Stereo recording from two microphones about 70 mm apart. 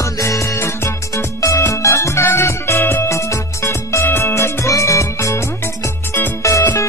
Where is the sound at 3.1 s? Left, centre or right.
Left.